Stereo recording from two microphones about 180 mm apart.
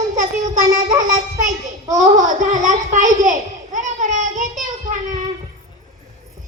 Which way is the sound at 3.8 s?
45° right (ahead or behind).